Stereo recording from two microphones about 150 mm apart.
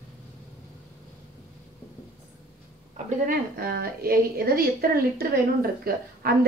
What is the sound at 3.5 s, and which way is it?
A woman's voice, 85° right.